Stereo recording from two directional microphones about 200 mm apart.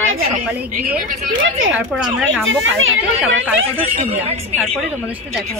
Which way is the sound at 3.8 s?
30° right (ahead or behind).